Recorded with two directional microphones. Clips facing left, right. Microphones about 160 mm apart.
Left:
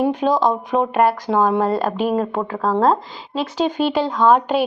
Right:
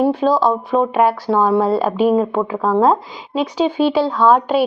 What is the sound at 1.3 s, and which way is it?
Speech, 15° left (ahead or behind).